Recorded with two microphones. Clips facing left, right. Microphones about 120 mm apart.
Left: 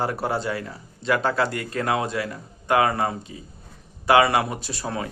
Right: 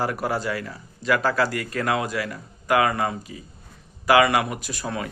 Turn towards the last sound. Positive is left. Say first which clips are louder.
# even
turn(degrees=30)  # may be behind; listen again after turning